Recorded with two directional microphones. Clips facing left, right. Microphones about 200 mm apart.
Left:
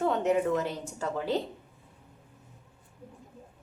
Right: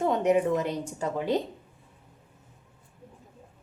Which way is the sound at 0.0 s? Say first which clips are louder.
Right 3 dB; 15° right (ahead or behind).